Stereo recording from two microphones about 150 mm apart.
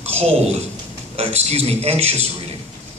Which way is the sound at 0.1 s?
45° right (ahead or behind).